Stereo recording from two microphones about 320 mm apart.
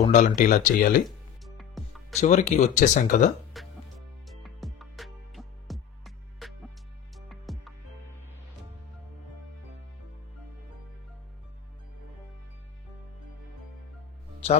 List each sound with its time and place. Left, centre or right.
0.0 s speech: left
1.0 s music: centre
2.1 s speech: left
3.6 s music: centre